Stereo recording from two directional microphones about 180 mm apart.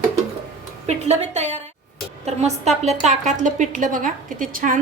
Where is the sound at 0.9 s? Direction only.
40° right (ahead or behind).